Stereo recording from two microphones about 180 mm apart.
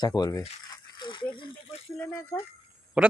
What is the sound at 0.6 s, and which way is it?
Rattle, 25° left (ahead or behind).